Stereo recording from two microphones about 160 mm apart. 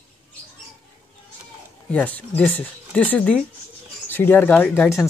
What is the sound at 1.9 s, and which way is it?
Speech, 10° left (ahead or behind).